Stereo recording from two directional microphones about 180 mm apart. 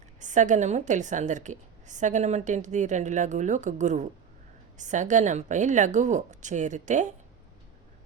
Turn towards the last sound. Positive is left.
turn(degrees=-40)  # may be behind; listen again after turning